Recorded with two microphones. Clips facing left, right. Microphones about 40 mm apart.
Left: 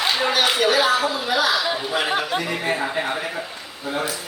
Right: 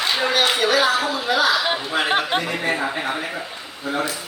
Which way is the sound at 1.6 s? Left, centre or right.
Right.